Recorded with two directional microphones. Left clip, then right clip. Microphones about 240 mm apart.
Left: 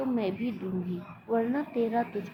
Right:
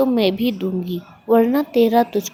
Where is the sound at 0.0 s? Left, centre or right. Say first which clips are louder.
Right 13 dB; right.